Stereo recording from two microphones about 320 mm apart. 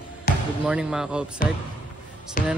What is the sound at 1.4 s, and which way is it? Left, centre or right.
Speech, left.